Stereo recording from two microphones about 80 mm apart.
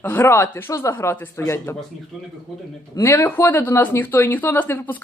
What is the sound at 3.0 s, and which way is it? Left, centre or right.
Speech, left.